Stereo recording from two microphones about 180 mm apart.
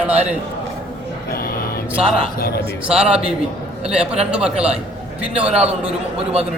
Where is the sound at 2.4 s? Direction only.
60° left (ahead or behind).